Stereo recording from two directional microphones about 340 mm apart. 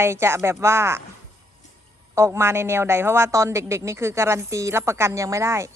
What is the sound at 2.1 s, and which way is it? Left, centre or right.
A woman's voice, centre.